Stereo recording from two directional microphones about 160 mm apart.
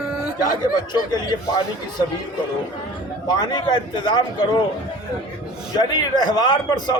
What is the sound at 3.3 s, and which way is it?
A man's voice, 25° left (ahead or behind).